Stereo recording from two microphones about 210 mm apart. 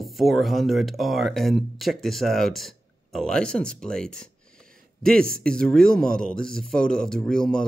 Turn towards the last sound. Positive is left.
turn(degrees=5)  # may be behind; listen again after turning